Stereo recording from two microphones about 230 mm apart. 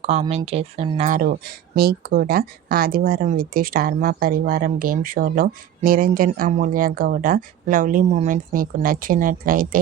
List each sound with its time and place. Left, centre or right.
0.0 s speech: right